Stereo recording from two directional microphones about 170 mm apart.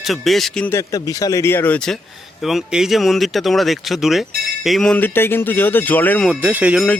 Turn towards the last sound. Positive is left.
turn(degrees=-10)  # may be behind; listen again after turning